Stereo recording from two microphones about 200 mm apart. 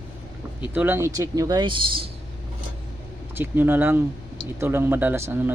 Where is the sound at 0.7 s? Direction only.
10° right (ahead or behind); by 2.1 s 25° right (ahead or behind).